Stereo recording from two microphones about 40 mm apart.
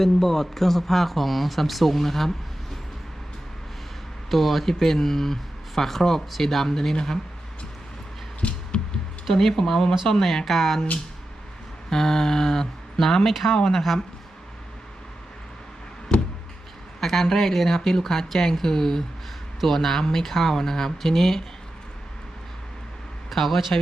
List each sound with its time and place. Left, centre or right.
0.0 s speech: centre
4.3 s speech: centre
8.4 s a sound: left
9.3 s speech: centre
11.9 s speech: centre
17.0 s speech: centre
23.3 s speech: centre